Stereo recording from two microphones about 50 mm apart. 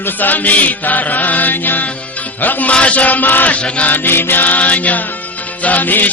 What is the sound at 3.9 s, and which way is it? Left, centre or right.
Mantra, left.